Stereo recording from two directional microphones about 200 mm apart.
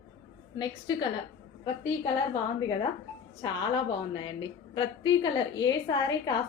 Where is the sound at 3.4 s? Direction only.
20° left (ahead or behind).